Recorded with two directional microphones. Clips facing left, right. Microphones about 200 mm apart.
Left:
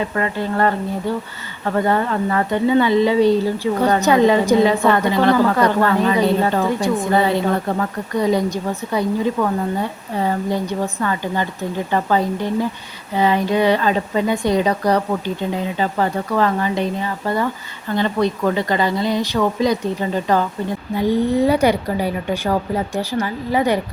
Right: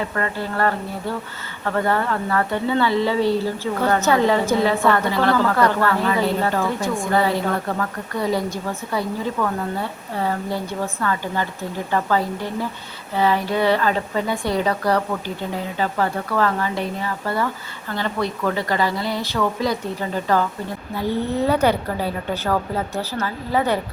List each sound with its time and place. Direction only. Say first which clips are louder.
0.2 s a woman's voice: left 4 dB; 20° left (ahead or behind)